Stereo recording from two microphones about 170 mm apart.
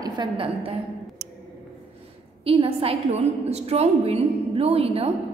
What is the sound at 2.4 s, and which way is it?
A woman's voice, 35° right (ahead or behind).